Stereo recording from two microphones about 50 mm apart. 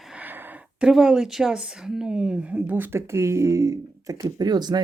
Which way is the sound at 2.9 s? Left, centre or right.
Right.